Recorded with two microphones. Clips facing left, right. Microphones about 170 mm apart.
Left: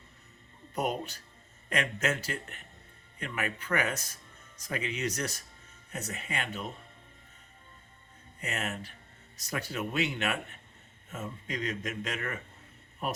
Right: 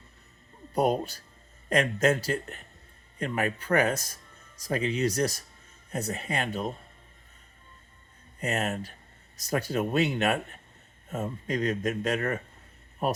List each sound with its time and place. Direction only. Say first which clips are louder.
0.7 s speech: right 7 dB; 35° right (ahead or behind)
8.4 s speech: right 7 dB; 40° right (ahead or behind)